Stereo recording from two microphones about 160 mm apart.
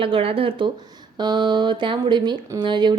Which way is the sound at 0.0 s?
35° right (ahead or behind).